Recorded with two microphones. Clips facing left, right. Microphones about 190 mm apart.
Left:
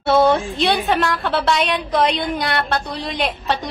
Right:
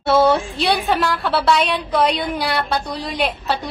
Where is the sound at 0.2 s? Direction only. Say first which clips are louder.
Even; 5° right (ahead or behind).